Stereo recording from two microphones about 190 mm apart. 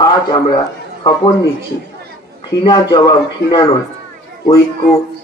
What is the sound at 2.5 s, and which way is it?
Speech, 20° left (ahead or behind).